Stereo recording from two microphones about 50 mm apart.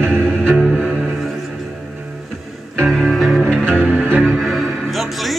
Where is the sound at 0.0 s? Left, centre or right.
Right.